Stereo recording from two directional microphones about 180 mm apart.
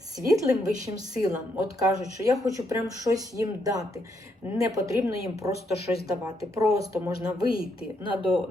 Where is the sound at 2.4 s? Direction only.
20° right (ahead or behind).